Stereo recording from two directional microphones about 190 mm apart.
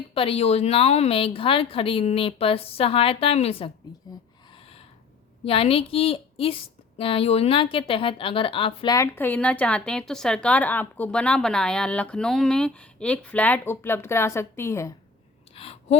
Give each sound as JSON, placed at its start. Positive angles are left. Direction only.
{"t": 0.1, "sound": "a woman's voice", "side_deg": 30}
{"t": 4.5, "sound": "snort", "side_deg": 30}
{"t": 5.5, "sound": "a woman's voice", "side_deg": 30}
{"t": 15.5, "sound": "a sound", "side_deg": 30}